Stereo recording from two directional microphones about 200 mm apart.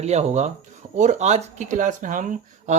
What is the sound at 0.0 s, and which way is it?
Speech, 35° right (ahead or behind).